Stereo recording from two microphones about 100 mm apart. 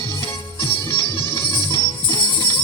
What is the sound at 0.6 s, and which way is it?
Music, 50° left (ahead or behind).